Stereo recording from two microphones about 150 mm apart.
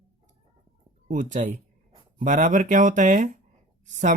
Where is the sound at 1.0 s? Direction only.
60° right (ahead or behind).